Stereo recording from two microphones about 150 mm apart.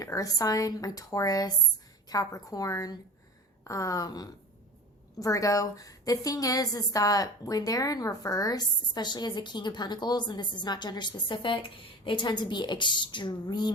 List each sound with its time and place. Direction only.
0.0 s a woman's voice: 25° left (ahead or behind)